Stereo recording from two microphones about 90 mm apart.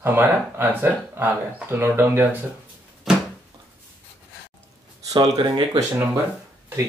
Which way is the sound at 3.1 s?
5° right (ahead or behind).